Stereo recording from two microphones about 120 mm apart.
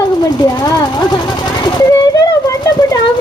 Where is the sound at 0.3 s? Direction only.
35° left (ahead or behind).